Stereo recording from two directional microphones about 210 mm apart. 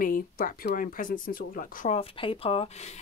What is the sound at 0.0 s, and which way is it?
A woman's voice, 40° left (ahead or behind).